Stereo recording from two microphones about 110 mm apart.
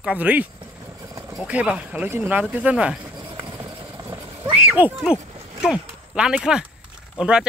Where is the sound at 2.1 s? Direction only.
20° right (ahead or behind).